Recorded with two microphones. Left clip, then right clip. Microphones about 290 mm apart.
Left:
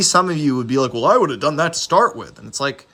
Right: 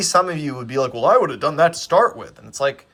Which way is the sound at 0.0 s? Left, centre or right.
Centre.